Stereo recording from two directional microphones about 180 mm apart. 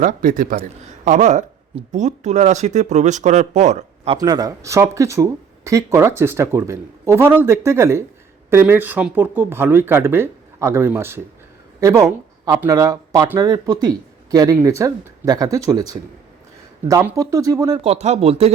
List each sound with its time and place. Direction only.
0.0 s a man's voice: 50° right (ahead or behind)
4.2 s speech: 20° right (ahead or behind)
17.8 s speech: 35° right (ahead or behind)